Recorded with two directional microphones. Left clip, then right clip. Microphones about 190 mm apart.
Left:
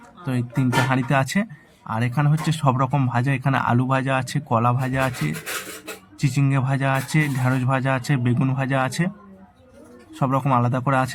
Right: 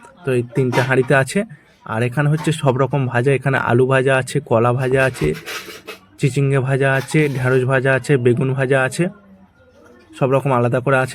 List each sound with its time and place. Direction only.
0.3 s speech: 15° right (ahead or behind)
6.1 s speech: 15° right (ahead or behind)
10.2 s speech: 15° right (ahead or behind)